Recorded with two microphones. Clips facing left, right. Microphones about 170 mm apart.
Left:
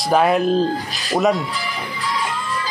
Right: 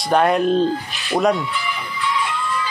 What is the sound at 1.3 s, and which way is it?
Music, 35° left (ahead or behind).